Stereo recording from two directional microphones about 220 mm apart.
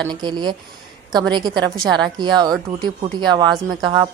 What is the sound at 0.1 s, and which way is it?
A woman's voice, 20° right (ahead or behind).